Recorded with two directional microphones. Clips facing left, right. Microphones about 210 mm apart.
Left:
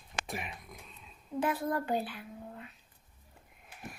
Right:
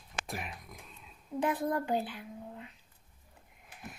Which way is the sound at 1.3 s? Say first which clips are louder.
Right 1 dB; 15° right (ahead or behind).